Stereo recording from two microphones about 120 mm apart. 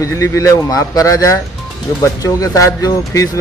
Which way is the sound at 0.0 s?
25° left (ahead or behind).